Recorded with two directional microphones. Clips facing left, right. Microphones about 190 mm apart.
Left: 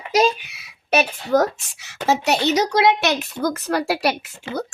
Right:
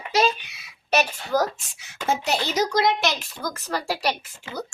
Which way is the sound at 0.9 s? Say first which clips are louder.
Left 4 dB; 65° left (ahead or behind).